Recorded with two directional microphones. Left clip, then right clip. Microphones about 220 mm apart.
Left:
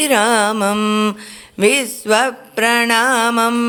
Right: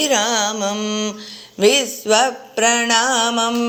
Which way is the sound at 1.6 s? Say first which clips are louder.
Even; 15° left (ahead or behind).